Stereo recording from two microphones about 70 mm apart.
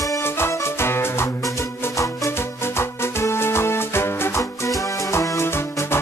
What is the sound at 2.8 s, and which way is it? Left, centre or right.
Music, left.